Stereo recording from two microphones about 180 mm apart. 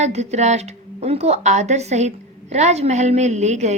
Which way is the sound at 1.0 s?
35° right (ahead or behind).